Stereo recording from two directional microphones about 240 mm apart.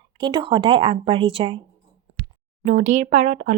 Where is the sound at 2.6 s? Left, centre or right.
Right.